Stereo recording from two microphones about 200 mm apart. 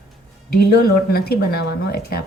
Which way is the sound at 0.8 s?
50° left (ahead or behind).